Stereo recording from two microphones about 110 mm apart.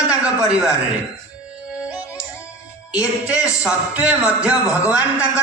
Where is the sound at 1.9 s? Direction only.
10° right (ahead or behind).